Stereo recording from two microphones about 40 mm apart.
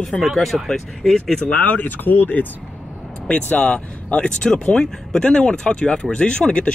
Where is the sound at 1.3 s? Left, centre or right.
Centre.